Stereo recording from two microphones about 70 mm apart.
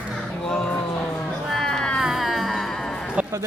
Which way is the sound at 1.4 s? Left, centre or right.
Centre.